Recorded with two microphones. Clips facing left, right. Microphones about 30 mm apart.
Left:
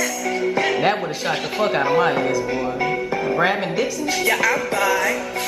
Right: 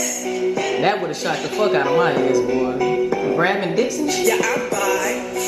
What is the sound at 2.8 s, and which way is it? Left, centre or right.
Music, left.